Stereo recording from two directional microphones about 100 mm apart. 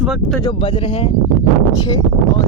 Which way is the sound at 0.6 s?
60° left (ahead or behind).